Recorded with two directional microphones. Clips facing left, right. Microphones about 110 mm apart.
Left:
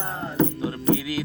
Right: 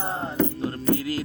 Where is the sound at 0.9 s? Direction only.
40° right (ahead or behind).